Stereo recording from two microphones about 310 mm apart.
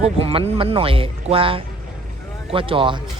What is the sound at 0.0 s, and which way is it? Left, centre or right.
A man's voice, centre.